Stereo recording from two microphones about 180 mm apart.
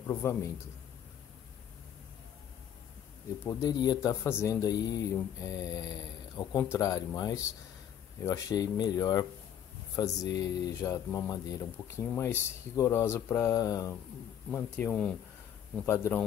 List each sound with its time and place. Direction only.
0.1 s speech: 15° left (ahead or behind)
3.4 s speech: 20° left (ahead or behind)